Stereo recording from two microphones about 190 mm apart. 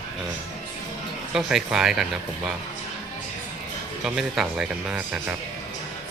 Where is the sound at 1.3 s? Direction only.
Centre (ahead or behind).